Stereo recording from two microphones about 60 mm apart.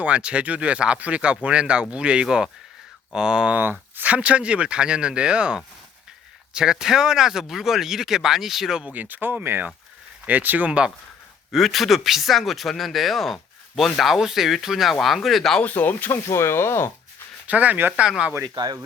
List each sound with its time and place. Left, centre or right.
0.0 s speech: centre
3.5 s speech: right
4.0 s speech: right; by 8.8 s centre
8.8 s speech: right
10.7 s speech: centre
11.5 s speech: centre
15.6 s speech: left
16.2 s speech: left
17.4 s speech: right